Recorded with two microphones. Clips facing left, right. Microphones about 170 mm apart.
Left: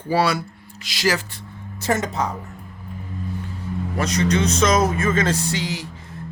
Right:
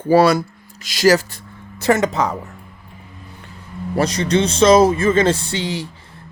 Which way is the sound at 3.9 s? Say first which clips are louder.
Right 4 dB; 30° right (ahead or behind).